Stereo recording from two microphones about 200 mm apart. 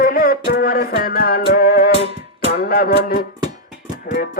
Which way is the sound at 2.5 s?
50° left (ahead or behind).